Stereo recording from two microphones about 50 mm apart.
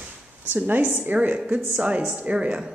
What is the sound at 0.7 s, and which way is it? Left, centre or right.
A woman's voice, right.